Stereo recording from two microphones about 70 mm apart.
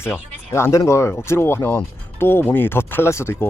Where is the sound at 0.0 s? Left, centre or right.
Left.